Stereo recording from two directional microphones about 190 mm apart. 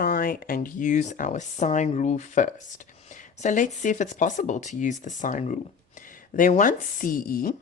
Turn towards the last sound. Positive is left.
turn(degrees=50)  # may be behind; listen again after turning